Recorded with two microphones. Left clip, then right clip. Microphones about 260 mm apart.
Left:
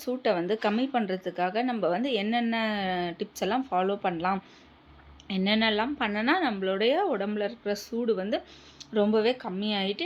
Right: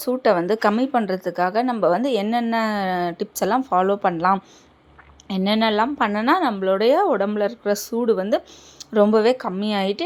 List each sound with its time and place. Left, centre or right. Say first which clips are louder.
0.0 s speech: right 9 dB; right